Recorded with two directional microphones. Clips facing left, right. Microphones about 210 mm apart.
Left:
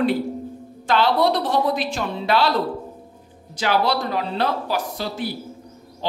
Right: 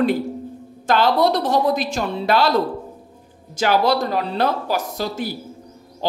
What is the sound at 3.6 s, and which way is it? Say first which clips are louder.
Speech: right 3 dB; 45° right (ahead or behind).